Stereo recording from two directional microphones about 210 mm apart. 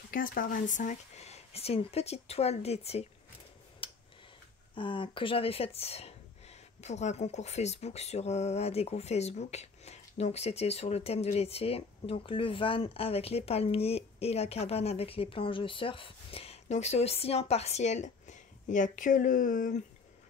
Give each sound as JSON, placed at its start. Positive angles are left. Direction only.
{"t": 0.1, "sound": "speech", "side_deg": 40}
{"t": 3.8, "sound": "tick-tock", "side_deg": 25}
{"t": 4.7, "sound": "speech", "side_deg": 25}